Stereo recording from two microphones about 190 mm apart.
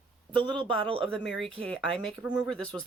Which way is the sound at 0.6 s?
30° right (ahead or behind).